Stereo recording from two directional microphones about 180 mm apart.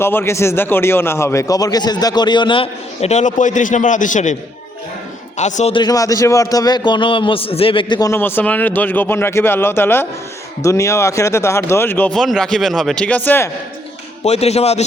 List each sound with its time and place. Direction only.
0.0 s a man's voice: 15° left (ahead or behind); by 4.4 s 45° left (ahead or behind)
5.4 s a man's voice: 40° left (ahead or behind)
5.7 s a man's voice: 20° left (ahead or behind)
14.3 s a man's voice: 35° left (ahead or behind)